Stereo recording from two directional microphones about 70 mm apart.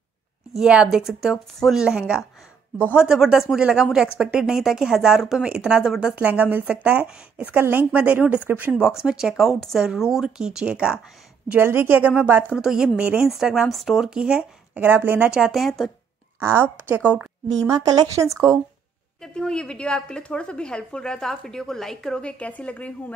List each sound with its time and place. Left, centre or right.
0.6 s speech: centre
6.1 s speech: right
7.5 s speech: right
8.7 s speech: centre
11.5 s a woman's voice: right
12.5 s speech: centre
13.3 s speech: centre
14.8 s speech: right
15.2 s speech: centre
15.6 s speech: centre
16.3 s a woman's voice: right
16.9 s speech: right
17.6 s speech: right
19.2 s a woman's voice: centre